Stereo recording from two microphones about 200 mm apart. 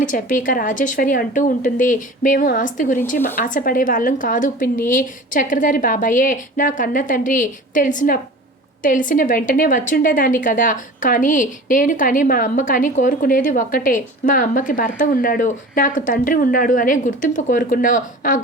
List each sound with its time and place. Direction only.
0.0 s a woman's voice: 40° left (ahead or behind)